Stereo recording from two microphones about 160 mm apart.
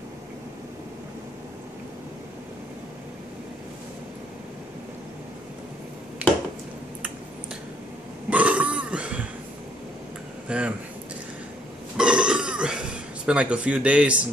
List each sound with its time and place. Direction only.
6.2 s a sound: 10° right (ahead or behind)
8.3 s burping: 10° right (ahead or behind)
10.5 s speech: 5° right (ahead or behind)
12.0 s burping: 5° right (ahead or behind)